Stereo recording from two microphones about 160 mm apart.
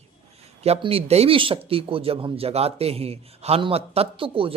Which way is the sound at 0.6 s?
40° right (ahead or behind).